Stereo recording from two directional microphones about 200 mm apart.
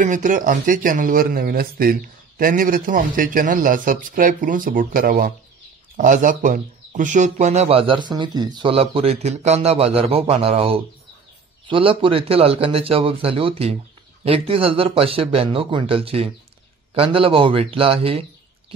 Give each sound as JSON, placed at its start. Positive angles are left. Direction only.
{"t": 0.0, "sound": "a man's voice", "side_deg": -40}